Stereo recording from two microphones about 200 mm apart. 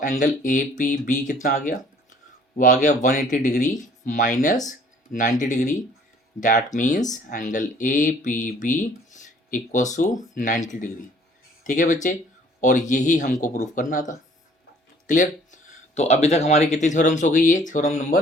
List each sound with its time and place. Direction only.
0.0 s speech: 40° left (ahead or behind)
15.0 s speech: 40° left (ahead or behind)